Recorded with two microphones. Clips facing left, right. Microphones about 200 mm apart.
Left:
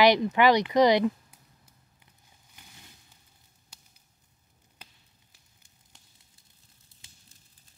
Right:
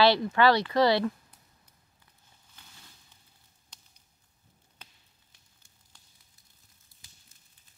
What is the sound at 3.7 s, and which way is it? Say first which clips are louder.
Whip: left 1 dB; 5° left (ahead or behind).